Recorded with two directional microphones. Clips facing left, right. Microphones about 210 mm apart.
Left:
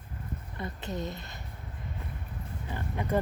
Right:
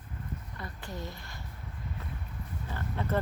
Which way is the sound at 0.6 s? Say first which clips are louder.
Left 7 dB; 20° left (ahead or behind).